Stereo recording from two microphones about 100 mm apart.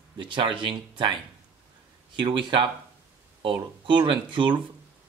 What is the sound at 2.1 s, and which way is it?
Speech, 55° right (ahead or behind).